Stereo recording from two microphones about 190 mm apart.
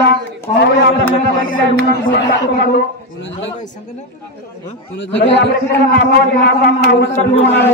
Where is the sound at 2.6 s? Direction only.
65° left (ahead or behind).